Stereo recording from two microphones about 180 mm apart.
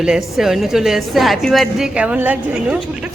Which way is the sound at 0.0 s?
Centre (ahead or behind).